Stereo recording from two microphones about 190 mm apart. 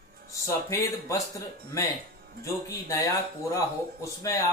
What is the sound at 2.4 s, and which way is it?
Speech, 15° left (ahead or behind).